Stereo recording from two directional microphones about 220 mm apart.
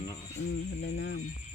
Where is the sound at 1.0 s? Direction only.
55° left (ahead or behind).